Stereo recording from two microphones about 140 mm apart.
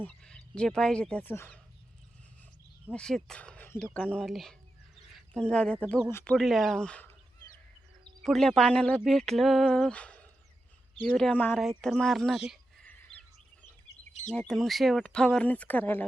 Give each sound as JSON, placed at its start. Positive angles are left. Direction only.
{"t": 0.0, "sound": "speech", "side_deg": 5}
{"t": 2.9, "sound": "speech", "side_deg": 5}
{"t": 6.1, "sound": "speech", "side_deg": 15}
{"t": 6.3, "sound": "speech", "side_deg": 0}
{"t": 8.2, "sound": "speech", "side_deg": 0}
{"t": 12.8, "sound": "a sound", "side_deg": 10}
{"t": 14.3, "sound": "speech", "side_deg": 5}